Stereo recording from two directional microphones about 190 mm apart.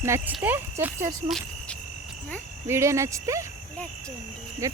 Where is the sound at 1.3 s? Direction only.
5° left (ahead or behind).